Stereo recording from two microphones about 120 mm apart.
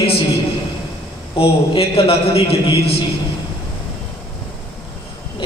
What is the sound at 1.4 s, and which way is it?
A man's voice, 50° left (ahead or behind).